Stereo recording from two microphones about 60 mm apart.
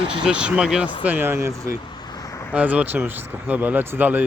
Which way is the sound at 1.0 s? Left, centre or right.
Right.